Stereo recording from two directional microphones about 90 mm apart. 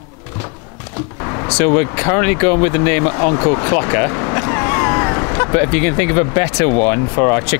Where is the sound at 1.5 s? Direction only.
15° left (ahead or behind).